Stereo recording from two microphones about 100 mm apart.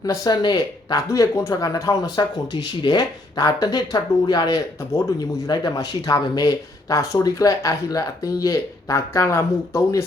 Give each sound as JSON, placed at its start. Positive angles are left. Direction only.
{"t": 0.0, "sound": "speech", "side_deg": 40}
{"t": 1.0, "sound": "speech", "side_deg": 30}
{"t": 2.5, "sound": "speech", "side_deg": 50}